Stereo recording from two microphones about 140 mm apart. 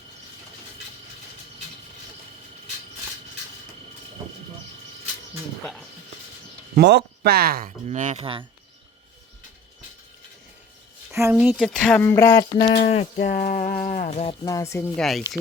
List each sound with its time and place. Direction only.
6.7 s speech: 90° right
7.9 s speech: 55° right (ahead or behind)
8.2 s speech: 40° right (ahead or behind)
11.1 s speech: 20° right (ahead or behind)
11.4 s speech: 5° right (ahead or behind)
11.8 s speech: 10° left (ahead or behind)
12.6 s speech: 55° left (ahead or behind)
13.3 s a sound: 65° left (ahead or behind)
14.4 s speech: 20° left (ahead or behind)
14.9 s speech: centre (ahead or behind)